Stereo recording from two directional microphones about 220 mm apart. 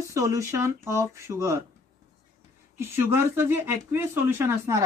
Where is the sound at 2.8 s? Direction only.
10° right (ahead or behind).